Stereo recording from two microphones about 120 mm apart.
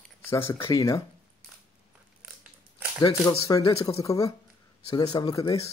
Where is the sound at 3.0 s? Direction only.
45° left (ahead or behind).